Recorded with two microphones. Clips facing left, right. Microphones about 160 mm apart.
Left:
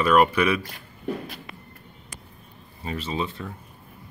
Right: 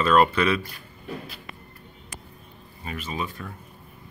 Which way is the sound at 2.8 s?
30° left (ahead or behind).